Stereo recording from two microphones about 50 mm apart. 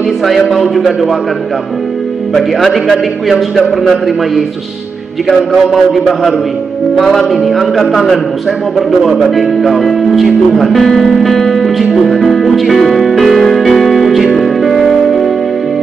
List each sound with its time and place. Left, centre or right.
0.2 s speech: centre
2.3 s speech: centre
5.7 s speech: centre
11.9 s music: centre